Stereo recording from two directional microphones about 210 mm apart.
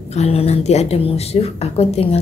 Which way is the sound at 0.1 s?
30° left (ahead or behind).